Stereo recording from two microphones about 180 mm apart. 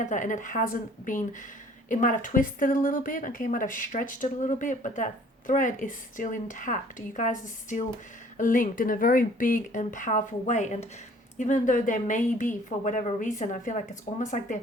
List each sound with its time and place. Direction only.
0.0 s a woman's voice: 45° left (ahead or behind)